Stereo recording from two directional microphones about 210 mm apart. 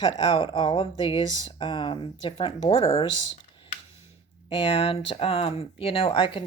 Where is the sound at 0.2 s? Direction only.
25° left (ahead or behind).